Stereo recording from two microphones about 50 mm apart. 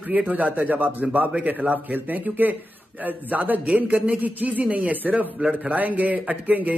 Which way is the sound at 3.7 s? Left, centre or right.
Right.